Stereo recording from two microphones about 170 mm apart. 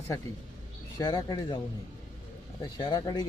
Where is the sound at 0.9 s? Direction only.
20° left (ahead or behind).